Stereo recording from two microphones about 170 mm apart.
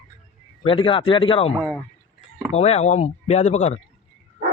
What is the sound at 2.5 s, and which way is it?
Speech, 40° left (ahead or behind).